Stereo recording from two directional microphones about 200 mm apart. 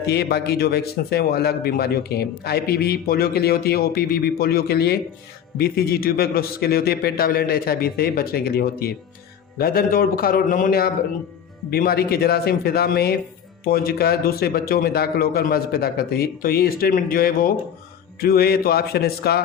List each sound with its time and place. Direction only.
0.0 s a man's voice: 55° left (ahead or behind)